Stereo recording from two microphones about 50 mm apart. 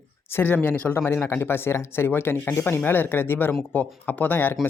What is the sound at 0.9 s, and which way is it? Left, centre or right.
Speech, left.